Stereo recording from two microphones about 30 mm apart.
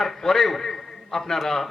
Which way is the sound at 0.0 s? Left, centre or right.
Centre.